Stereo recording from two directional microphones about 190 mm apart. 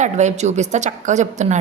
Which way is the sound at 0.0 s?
40° right (ahead or behind).